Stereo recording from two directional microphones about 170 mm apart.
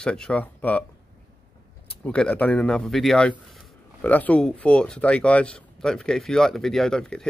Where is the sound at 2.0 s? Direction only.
5° left (ahead or behind).